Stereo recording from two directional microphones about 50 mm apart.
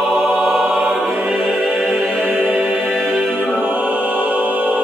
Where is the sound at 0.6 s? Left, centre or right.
Right.